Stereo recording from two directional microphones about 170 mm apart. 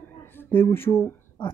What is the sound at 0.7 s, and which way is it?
Speech, 15° left (ahead or behind).